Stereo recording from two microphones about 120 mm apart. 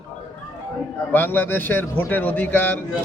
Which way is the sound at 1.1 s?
15° left (ahead or behind).